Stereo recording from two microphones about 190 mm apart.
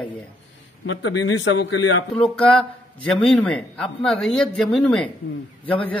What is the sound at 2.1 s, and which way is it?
Speech, 5° left (ahead or behind).